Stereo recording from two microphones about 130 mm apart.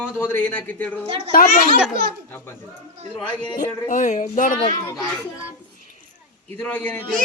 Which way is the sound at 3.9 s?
70° left (ahead or behind).